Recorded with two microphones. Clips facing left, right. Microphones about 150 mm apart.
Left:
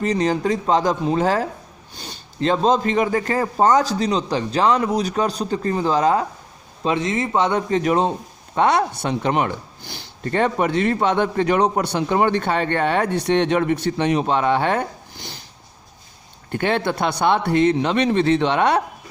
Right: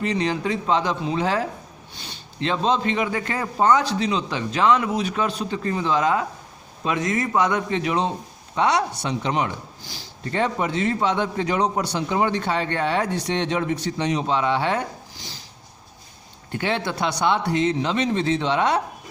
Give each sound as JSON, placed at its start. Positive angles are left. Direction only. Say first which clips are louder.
{"t": 0.0, "sound": "a man's voice", "louder": "left 4 dB", "side_deg": 40}
{"t": 7.7, "sound": "a man's voice", "louder": "left 5 dB", "side_deg": 45}
{"t": 16.5, "sound": "speech", "louder": "left 4 dB", "side_deg": 50}